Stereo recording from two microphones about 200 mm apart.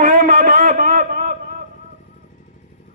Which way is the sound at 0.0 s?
40° right (ahead or behind).